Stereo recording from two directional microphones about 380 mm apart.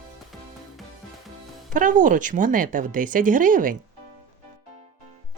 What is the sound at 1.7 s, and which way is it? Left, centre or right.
Speech, right.